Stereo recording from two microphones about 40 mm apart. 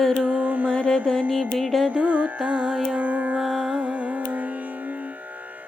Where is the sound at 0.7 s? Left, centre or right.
Left.